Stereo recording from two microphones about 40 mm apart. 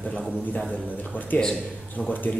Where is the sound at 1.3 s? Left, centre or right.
Left.